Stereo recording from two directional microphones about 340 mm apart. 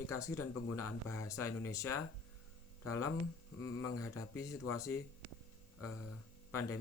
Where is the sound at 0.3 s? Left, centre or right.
Left.